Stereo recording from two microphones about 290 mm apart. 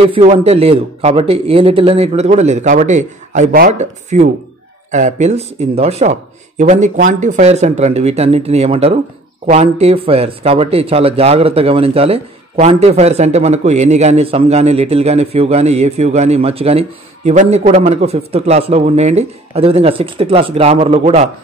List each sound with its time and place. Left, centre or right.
0.0 s speech: centre